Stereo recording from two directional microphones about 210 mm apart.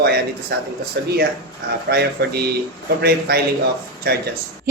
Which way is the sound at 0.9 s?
55° right (ahead or behind).